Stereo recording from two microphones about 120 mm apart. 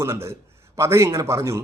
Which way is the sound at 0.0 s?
25° right (ahead or behind).